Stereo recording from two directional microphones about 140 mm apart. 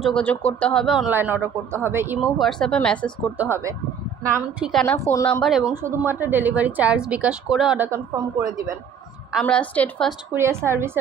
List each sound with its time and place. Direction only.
0.0 s speech: 5° left (ahead or behind)
1.1 s a woman's voice: 15° right (ahead or behind)
2.1 s a woman's voice: centre (ahead or behind)
3.3 s a woman's voice: 20° right (ahead or behind)
4.6 s a woman's voice: centre (ahead or behind)
4.8 s speech: 20° left (ahead or behind)
5.4 s a woman's voice: centre (ahead or behind)
5.8 s a woman's voice: 15° right (ahead or behind)
9.4 s speech: 10° left (ahead or behind)
10.3 s a woman's voice: 20° right (ahead or behind)